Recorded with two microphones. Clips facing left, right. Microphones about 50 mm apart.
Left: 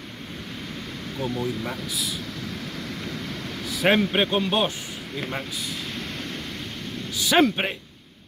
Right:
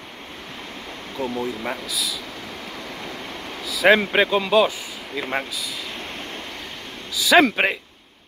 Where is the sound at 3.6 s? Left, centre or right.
Right.